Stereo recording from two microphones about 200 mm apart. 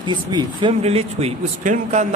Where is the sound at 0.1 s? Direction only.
25° right (ahead or behind).